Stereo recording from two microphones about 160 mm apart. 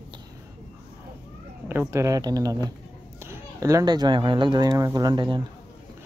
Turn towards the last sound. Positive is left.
turn(degrees=-30)  # may be behind; listen again after turning